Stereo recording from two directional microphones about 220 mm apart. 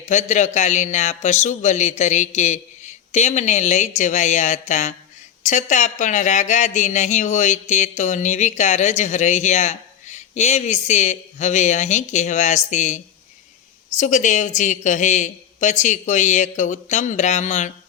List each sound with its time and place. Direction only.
0.0 s speech: 35° left (ahead or behind)